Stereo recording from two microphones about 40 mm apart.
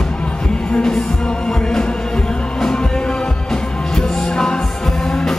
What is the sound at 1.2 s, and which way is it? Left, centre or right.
Music, left.